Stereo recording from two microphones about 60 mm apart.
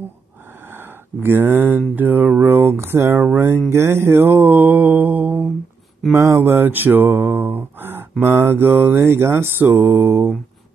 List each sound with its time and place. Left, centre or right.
0.7 s speech: right
2.0 s mantra: right
6.1 s mantra: right